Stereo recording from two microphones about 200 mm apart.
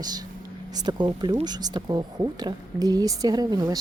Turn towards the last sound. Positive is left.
turn(degrees=-20)  # may be behind; listen again after turning